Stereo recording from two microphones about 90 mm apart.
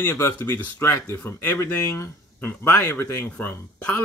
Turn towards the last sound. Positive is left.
turn(degrees=20)  # may be behind; listen again after turning